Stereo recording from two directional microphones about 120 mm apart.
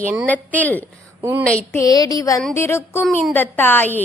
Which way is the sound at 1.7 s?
30° left (ahead or behind).